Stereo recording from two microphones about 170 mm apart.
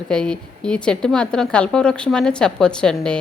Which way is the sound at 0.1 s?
5° left (ahead or behind).